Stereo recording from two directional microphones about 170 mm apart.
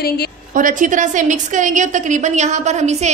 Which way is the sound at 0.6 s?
50° right (ahead or behind).